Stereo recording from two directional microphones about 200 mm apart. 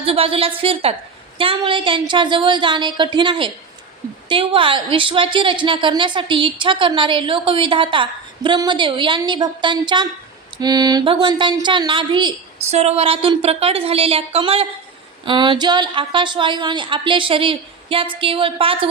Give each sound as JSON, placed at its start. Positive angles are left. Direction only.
{"t": 0.0, "sound": "speech", "side_deg": -30}